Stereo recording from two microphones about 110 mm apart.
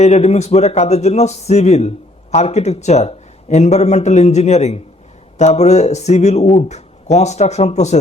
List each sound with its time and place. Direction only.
0.0 s a man's voice: 90° left